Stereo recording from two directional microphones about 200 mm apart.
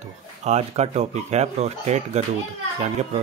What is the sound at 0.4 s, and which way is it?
Speech, 35° right (ahead or behind).